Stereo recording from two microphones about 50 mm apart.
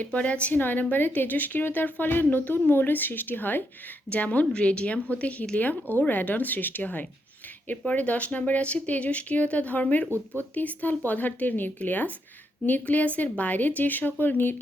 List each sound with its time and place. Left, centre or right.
0.1 s speech: left
0.6 s a woman's voice: left